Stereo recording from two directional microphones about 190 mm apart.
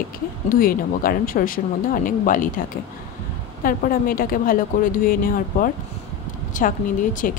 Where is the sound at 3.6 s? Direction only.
50° left (ahead or behind).